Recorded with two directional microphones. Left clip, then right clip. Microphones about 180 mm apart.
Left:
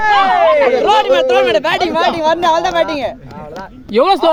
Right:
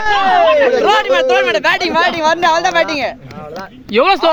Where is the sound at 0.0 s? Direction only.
50° right (ahead or behind).